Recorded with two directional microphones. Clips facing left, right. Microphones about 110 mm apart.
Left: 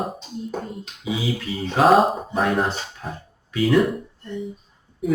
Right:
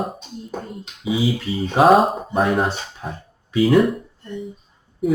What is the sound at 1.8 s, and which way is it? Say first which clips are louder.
Speech: right 2 dB; centre (ahead or behind).